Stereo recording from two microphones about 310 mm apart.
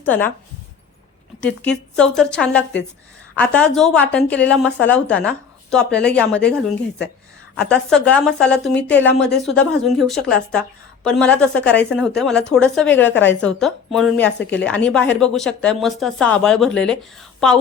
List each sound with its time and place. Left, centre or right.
0.0 s speech: centre
1.4 s a woman's voice: centre